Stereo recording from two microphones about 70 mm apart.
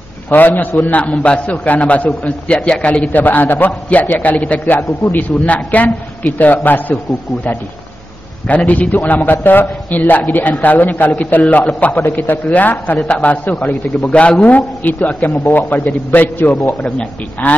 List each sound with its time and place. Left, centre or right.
0.3 s a man's voice: left
8.5 s a man's voice: left